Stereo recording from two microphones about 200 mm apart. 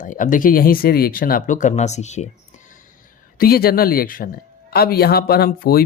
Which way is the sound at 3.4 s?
50° left (ahead or behind).